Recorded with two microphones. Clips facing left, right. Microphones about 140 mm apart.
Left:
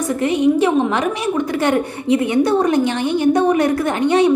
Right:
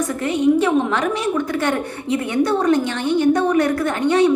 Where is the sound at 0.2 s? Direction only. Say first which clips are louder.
Left 2 dB; 15° left (ahead or behind).